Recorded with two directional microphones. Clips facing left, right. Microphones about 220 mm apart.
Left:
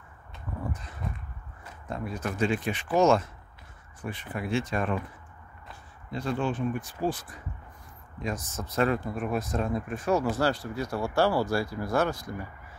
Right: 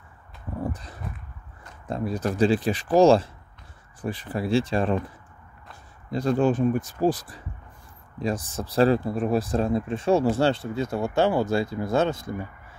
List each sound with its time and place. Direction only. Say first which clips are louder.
0.5 s horse: right 5 dB; 30° right (ahead or behind)
1.9 s speech: right 6 dB; 35° right (ahead or behind)
6.0 s speech: right 8 dB; 40° right (ahead or behind)